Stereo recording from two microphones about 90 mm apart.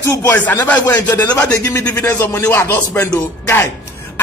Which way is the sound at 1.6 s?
30° left (ahead or behind).